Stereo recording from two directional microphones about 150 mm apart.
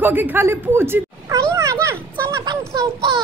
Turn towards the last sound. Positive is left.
turn(degrees=-25)  # may be behind; listen again after turning